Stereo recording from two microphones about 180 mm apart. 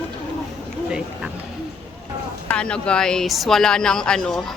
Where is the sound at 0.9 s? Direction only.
5° right (ahead or behind).